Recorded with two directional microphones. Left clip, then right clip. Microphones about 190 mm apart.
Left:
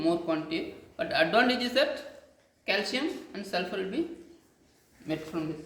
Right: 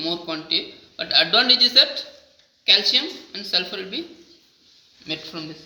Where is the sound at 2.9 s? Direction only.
5° left (ahead or behind).